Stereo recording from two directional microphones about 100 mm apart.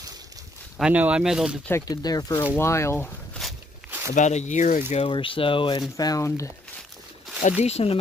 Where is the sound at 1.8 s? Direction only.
40° left (ahead or behind).